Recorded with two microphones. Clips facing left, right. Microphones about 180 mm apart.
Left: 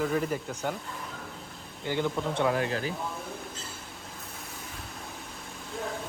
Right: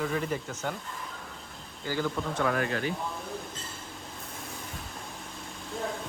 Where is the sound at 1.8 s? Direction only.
20° left (ahead or behind).